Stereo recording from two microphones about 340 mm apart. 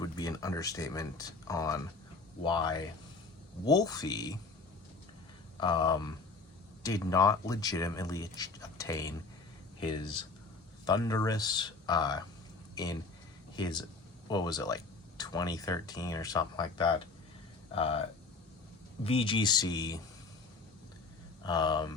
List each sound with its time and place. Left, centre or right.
0.0 s speech: centre
5.5 s speech: centre
19.0 s speech: centre
21.4 s speech: centre